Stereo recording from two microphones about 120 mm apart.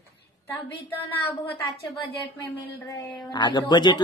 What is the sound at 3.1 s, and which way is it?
Speech, 35° left (ahead or behind).